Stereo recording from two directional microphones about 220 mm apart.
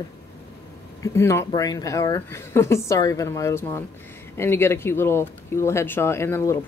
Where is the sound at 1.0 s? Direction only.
10° left (ahead or behind).